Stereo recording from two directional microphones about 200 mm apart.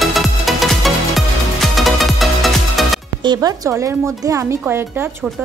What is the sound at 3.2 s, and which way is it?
A woman's voice, 20° right (ahead or behind).